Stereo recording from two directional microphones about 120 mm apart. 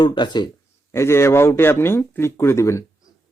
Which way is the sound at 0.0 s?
40° left (ahead or behind).